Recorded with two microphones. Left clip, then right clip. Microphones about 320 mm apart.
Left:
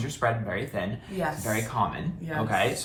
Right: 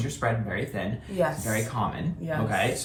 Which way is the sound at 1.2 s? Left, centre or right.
Centre.